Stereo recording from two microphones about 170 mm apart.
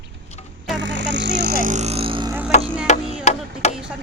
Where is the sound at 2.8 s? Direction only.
40° left (ahead or behind).